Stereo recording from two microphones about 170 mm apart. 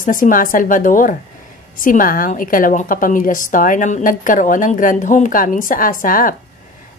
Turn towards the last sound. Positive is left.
turn(degrees=55)  # may be behind; listen again after turning